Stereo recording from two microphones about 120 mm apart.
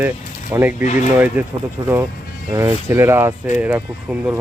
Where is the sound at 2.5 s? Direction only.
20° right (ahead or behind).